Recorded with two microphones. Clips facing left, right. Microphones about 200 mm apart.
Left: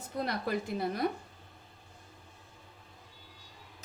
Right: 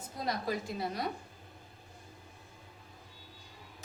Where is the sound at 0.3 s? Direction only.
60° left (ahead or behind).